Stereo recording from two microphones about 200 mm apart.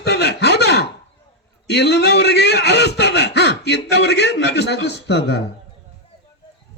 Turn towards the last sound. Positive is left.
turn(degrees=55)  # may be behind; listen again after turning